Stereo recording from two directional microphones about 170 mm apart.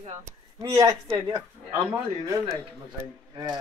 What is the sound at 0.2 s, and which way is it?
Speech, 20° right (ahead or behind).